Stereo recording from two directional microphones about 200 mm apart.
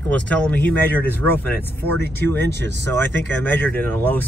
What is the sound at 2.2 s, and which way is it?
Speech, 10° left (ahead or behind).